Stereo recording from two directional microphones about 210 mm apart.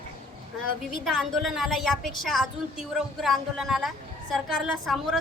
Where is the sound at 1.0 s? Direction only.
Centre (ahead or behind).